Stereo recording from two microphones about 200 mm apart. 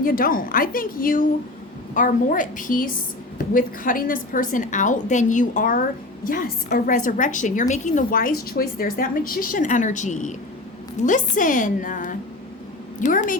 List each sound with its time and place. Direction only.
0.0 s a woman's voice: 45° left (ahead or behind)